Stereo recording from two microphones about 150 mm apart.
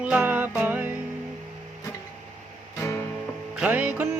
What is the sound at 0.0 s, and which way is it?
Music, 10° right (ahead or behind).